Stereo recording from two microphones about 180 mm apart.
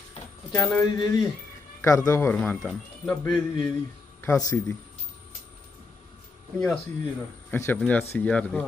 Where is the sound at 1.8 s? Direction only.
15° left (ahead or behind).